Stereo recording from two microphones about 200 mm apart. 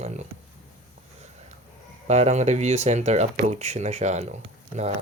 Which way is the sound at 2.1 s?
35° right (ahead or behind).